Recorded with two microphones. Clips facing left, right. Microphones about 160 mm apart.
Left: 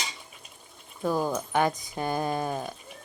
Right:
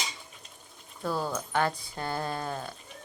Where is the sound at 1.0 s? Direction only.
15° left (ahead or behind).